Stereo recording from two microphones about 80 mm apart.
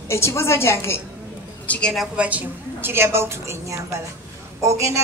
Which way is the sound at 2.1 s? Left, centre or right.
Centre.